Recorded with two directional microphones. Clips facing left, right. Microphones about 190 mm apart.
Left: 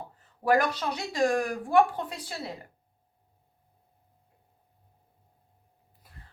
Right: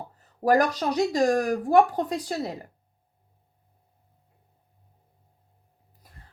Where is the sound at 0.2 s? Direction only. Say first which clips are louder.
Right 3 dB; 40° right (ahead or behind).